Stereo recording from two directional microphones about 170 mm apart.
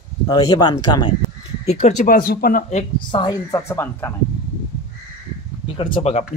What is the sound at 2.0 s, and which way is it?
Speech, 60° left (ahead or behind).